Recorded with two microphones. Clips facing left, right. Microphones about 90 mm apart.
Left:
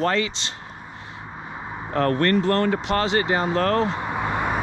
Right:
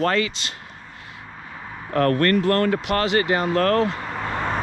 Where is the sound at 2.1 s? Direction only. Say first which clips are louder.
Even; 25° left (ahead or behind).